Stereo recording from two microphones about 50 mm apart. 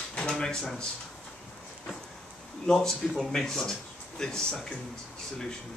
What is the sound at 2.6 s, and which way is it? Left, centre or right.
Speech, centre.